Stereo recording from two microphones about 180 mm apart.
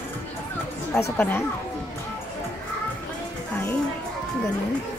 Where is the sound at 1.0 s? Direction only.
10° left (ahead or behind).